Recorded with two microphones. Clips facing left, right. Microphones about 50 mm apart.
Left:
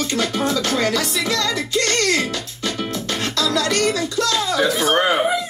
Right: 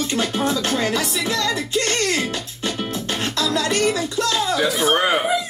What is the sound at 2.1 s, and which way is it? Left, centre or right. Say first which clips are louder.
Music: left 2 dB; right.